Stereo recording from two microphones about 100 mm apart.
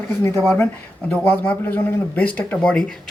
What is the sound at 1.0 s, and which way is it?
Speech, 15° left (ahead or behind).